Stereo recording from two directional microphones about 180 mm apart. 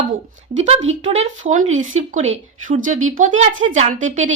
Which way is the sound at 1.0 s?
40° right (ahead or behind).